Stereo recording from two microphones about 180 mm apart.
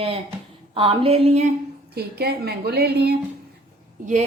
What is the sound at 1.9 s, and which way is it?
A woman's voice, 60° right (ahead or behind).